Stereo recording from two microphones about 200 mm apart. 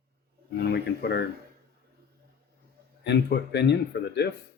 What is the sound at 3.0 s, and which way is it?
Speech, 60° left (ahead or behind).